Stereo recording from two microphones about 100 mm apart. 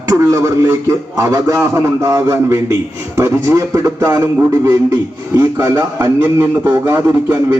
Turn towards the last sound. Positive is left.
turn(degrees=-20)  # may be behind; listen again after turning